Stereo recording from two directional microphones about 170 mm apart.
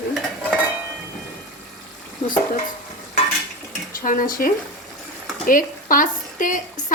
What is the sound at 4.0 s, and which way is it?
A woman's voice, 55° left (ahead or behind).